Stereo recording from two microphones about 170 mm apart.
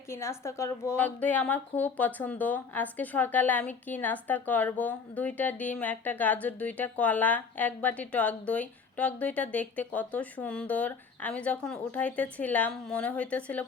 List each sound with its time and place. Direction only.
0.1 s a woman's voice: 15° left (ahead or behind)